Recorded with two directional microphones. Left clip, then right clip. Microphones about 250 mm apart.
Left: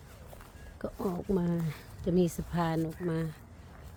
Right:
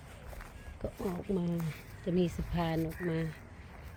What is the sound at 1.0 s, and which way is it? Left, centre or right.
Speech, left.